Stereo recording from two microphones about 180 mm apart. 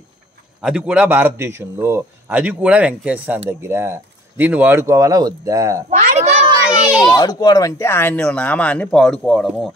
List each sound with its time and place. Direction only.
0.6 s a man's voice: 5° right (ahead or behind)
5.9 s cat: 40° right (ahead or behind)
6.9 s a sound: centre (ahead or behind)
7.2 s speech: 20° left (ahead or behind); by 9.7 s centre (ahead or behind)